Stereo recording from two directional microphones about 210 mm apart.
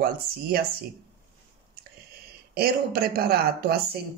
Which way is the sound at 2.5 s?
45° right (ahead or behind).